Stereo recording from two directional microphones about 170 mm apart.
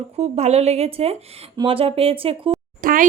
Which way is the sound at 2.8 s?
55° right (ahead or behind).